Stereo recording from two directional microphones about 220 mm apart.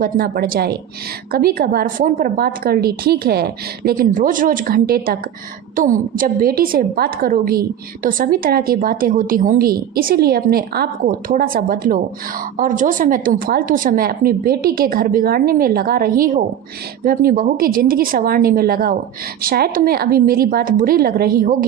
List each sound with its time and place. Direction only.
0.0 s a woman's voice: 40° right (ahead or behind)